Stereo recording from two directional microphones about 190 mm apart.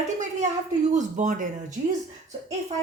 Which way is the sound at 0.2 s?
40° right (ahead or behind).